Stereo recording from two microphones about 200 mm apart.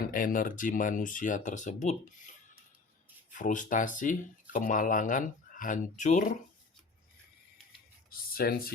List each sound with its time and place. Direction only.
0.1 s speech: 45° left (ahead or behind)
3.3 s speech: 40° left (ahead or behind)
8.1 s speech: 50° left (ahead or behind)